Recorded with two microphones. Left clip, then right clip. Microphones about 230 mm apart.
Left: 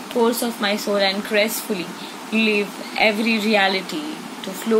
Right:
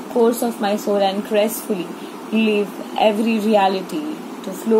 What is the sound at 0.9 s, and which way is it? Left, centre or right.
Speech, left.